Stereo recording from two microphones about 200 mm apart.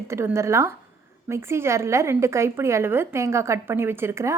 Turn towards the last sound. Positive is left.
turn(degrees=-15)  # may be behind; listen again after turning